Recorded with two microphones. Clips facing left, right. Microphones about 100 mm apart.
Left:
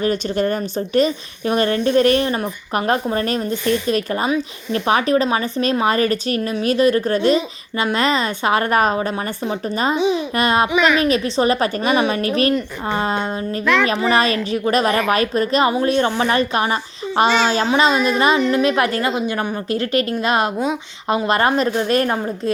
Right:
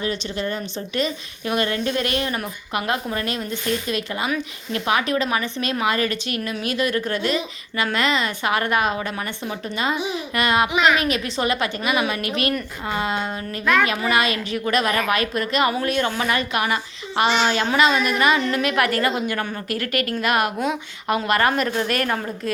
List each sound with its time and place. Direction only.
0.0 s a woman's voice: 45° left (ahead or behind); by 22.5 s 25° left (ahead or behind)